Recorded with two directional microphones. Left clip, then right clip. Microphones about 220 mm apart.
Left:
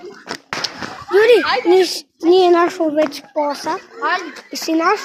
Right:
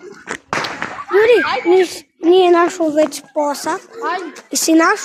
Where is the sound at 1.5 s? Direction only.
35° left (ahead or behind).